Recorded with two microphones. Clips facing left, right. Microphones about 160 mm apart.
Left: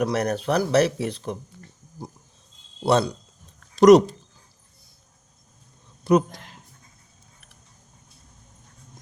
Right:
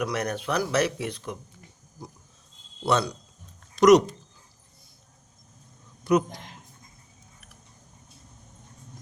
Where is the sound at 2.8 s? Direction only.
35° left (ahead or behind).